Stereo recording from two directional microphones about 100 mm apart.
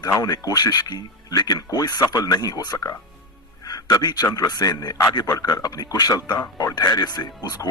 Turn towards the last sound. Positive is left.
turn(degrees=40)  # may be behind; listen again after turning